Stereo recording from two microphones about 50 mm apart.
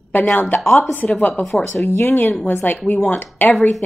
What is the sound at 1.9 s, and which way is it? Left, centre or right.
Speech, left.